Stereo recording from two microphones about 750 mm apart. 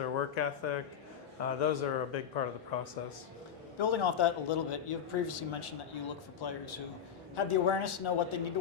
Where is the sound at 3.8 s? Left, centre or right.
Left.